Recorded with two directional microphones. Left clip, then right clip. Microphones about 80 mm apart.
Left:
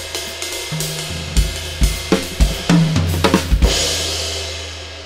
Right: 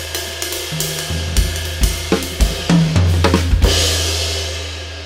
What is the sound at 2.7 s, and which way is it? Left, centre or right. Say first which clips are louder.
Drum kit: left 1 dB; centre.